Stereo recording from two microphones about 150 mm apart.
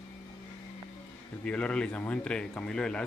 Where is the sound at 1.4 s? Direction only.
10° left (ahead or behind).